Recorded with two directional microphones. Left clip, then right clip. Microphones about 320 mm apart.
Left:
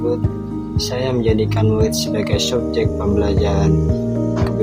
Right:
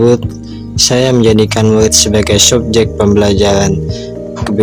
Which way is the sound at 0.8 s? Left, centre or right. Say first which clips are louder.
Right 11 dB; right.